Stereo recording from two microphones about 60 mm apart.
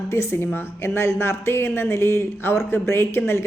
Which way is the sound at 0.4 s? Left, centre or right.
Left.